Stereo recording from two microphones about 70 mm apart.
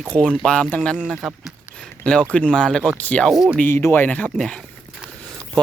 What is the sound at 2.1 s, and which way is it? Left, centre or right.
Speech, centre.